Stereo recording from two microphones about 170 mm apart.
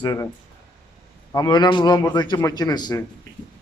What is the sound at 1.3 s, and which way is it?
A man's voice, 25° left (ahead or behind).